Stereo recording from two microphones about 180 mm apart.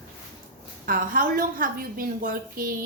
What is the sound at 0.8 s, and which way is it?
A woman's voice, 50° right (ahead or behind).